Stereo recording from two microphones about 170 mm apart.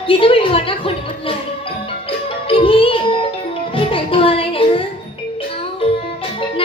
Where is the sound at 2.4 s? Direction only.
30° left (ahead or behind).